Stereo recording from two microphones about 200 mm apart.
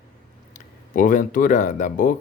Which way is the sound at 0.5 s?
40° left (ahead or behind).